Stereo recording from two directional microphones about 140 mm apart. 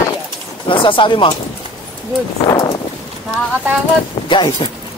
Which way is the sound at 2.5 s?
25° left (ahead or behind).